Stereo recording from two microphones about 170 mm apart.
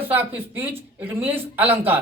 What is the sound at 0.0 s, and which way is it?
Speech, 10° right (ahead or behind).